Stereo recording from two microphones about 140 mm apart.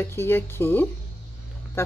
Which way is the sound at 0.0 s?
15° left (ahead or behind).